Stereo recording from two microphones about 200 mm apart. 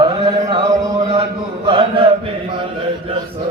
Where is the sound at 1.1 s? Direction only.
30° right (ahead or behind).